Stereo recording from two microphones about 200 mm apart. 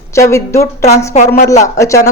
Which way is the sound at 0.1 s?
15° left (ahead or behind).